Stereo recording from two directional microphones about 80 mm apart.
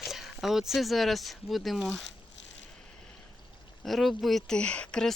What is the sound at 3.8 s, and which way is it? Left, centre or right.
Speech, centre.